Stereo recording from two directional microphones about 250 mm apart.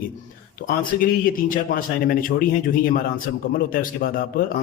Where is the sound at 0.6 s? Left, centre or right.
Left.